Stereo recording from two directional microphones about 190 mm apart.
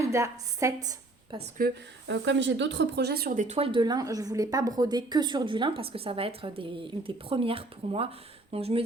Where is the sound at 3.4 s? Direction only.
30° right (ahead or behind).